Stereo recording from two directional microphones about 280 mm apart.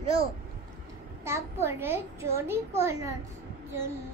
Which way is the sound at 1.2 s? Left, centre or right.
Centre.